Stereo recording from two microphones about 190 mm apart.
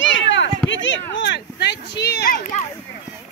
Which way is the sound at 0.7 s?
75° left (ahead or behind).